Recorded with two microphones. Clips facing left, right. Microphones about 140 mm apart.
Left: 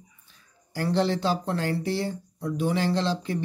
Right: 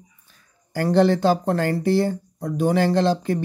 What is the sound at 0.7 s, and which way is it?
Speech, 55° right (ahead or behind).